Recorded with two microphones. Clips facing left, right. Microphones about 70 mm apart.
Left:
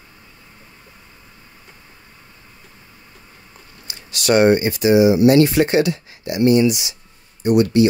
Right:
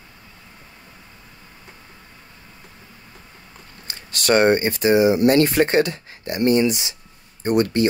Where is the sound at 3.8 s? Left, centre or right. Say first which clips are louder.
Left 2 dB; right.